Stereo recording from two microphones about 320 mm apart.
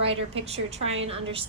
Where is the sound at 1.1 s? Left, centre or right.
Centre.